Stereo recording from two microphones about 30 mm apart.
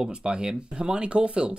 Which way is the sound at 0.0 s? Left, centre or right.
Right.